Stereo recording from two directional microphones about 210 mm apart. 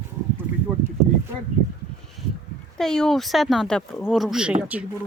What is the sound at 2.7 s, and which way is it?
Speech, centre (ahead or behind).